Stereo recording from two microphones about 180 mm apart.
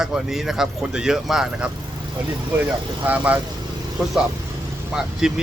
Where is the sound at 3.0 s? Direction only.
10° right (ahead or behind).